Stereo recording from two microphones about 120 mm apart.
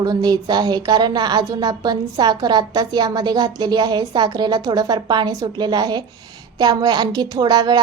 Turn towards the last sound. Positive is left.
turn(degrees=-35)  # may be behind; listen again after turning